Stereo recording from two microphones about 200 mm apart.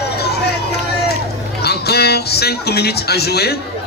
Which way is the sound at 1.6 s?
55° left (ahead or behind).